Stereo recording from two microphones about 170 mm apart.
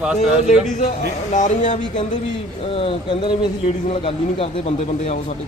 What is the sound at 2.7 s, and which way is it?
Speech, 30° left (ahead or behind).